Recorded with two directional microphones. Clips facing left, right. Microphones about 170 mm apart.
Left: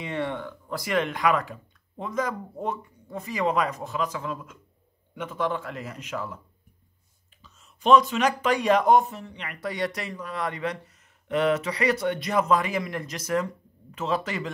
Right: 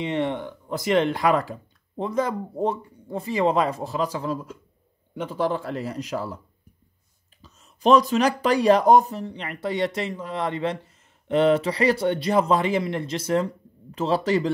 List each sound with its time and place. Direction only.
0.0 s speech: 20° right (ahead or behind)
7.4 s speech: 40° right (ahead or behind)